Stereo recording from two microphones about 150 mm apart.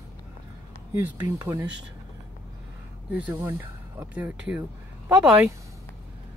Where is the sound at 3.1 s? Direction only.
10° right (ahead or behind).